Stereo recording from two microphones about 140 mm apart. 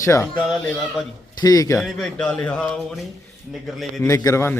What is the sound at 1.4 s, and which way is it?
Speech, 25° left (ahead or behind).